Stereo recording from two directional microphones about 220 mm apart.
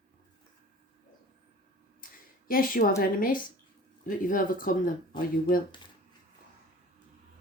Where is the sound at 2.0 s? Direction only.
40° left (ahead or behind).